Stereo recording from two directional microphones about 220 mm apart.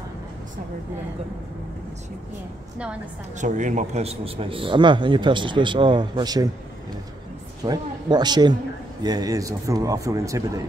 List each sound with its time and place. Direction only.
3.3 s a man's voice: 35° right (ahead or behind); by 6.5 s 20° right (ahead or behind)
7.6 s a man's voice: 20° right (ahead or behind)